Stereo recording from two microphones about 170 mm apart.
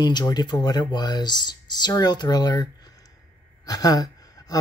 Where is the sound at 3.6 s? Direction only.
20° left (ahead or behind).